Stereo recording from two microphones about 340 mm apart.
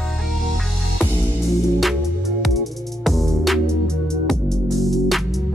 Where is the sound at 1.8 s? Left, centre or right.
Centre.